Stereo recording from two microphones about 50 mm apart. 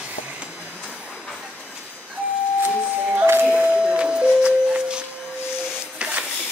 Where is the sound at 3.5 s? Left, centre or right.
Centre.